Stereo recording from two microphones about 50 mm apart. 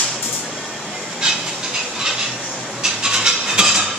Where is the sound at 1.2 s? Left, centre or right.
Centre.